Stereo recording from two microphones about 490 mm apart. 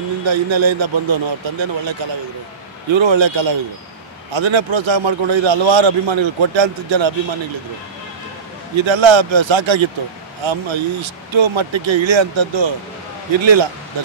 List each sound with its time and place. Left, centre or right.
0.3 s a man's voice: right
8.7 s a man's voice: right